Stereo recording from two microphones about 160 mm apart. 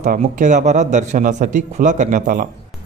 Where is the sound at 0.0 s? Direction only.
50° right (ahead or behind).